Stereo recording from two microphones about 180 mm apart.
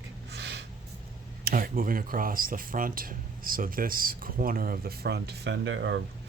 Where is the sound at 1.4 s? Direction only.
50° right (ahead or behind); by 5.9 s 80° right.